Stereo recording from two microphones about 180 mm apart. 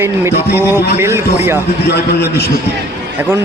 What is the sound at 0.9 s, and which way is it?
Speech, 10° right (ahead or behind).